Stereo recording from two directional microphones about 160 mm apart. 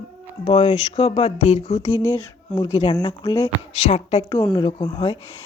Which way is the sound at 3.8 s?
40° left (ahead or behind).